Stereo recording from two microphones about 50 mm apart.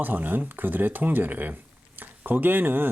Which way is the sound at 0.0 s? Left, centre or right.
Right.